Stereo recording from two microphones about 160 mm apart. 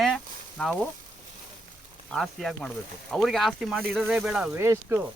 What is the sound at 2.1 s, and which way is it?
Speech, centre (ahead or behind).